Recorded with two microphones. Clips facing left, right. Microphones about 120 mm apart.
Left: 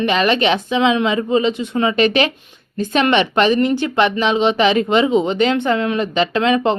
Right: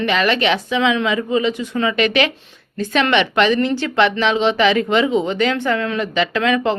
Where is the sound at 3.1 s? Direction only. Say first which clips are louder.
Even; 40° left (ahead or behind).